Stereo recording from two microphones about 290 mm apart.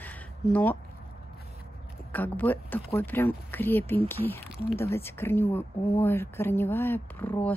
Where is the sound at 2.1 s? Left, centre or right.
Centre.